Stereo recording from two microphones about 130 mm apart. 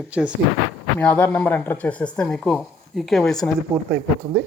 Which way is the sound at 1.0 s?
10° left (ahead or behind).